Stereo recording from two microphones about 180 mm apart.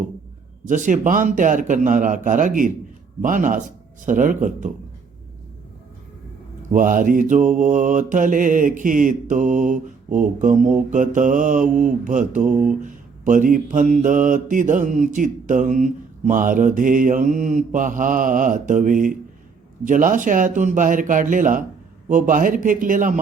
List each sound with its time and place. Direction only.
0.7 s mantra: 45° right (ahead or behind)
6.7 s mantra: 50° right (ahead or behind)